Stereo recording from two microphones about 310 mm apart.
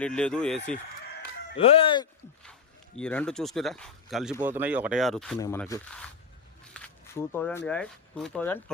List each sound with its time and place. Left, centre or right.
0.0 s speech: centre
1.5 s speech: centre
3.0 s speech: centre